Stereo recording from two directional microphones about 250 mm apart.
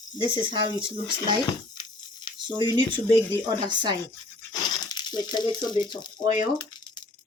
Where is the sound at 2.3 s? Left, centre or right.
Centre.